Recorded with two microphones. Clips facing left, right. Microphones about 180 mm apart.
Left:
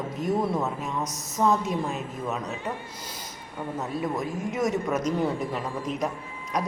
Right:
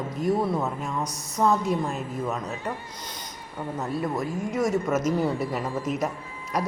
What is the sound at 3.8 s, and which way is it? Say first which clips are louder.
A woman's voice: right 1 dB; centre (ahead or behind).